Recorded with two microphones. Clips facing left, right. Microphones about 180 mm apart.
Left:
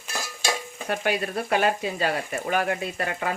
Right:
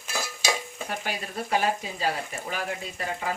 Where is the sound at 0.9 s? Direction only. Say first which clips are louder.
Left 9 dB; 65° left (ahead or behind).